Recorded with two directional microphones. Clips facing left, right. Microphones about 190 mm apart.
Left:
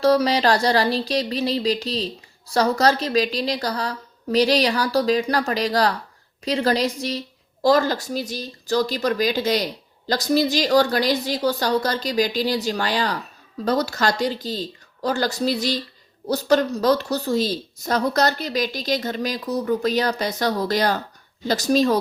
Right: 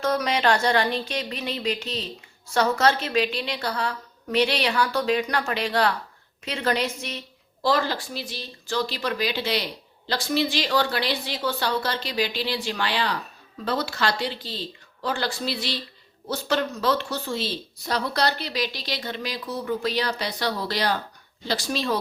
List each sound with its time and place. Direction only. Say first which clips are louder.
0.0 s a woman's voice: left 6 dB; 35° left (ahead or behind)